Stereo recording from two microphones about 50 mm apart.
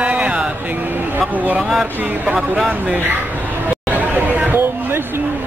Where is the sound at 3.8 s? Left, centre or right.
Right.